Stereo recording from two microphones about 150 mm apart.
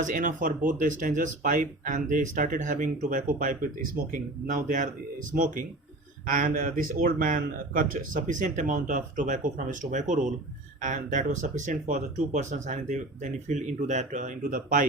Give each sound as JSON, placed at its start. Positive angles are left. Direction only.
{"t": 0.0, "sound": "speech", "side_deg": -55}
{"t": 6.2, "sound": "speech", "side_deg": -65}